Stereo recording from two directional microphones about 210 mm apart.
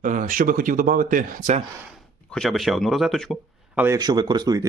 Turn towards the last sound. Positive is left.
turn(degrees=-20)  # may be behind; listen again after turning